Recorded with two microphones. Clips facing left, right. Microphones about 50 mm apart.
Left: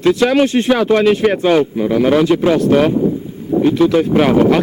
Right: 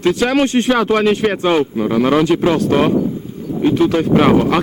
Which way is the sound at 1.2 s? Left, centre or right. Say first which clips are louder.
Left 2 dB; centre.